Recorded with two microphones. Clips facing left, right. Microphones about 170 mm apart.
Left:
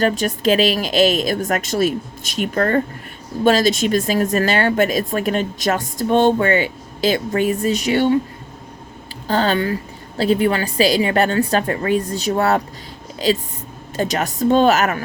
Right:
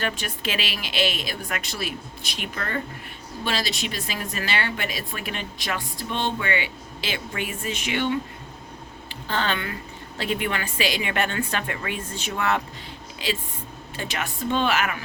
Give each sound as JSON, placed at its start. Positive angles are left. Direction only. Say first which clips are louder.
{"t": 0.0, "sound": "speech", "louder": "left 11 dB", "side_deg": 40}
{"t": 9.2, "sound": "a woman's voice", "louder": "left 9 dB", "side_deg": 40}